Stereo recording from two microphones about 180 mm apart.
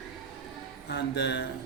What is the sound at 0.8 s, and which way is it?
Speech, 70° left (ahead or behind).